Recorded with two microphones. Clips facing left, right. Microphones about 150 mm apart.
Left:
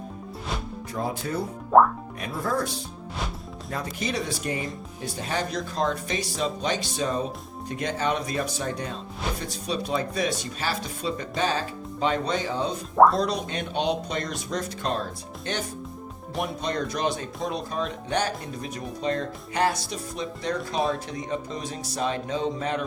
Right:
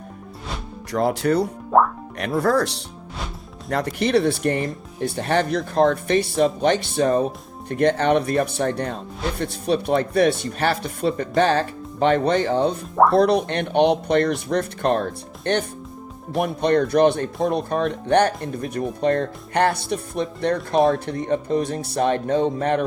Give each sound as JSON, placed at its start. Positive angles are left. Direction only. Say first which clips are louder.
{"t": 0.9, "sound": "speech", "louder": "right 10 dB", "side_deg": -75}
{"t": 1.7, "sound": "speech", "louder": "even", "side_deg": 0}
{"t": 2.1, "sound": "speech", "louder": "right 10 dB", "side_deg": -75}